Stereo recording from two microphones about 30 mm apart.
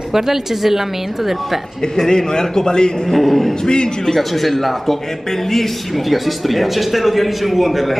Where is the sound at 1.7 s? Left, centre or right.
Centre.